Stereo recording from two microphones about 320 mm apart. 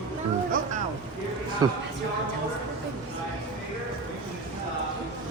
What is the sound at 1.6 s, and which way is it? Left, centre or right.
Speech, centre.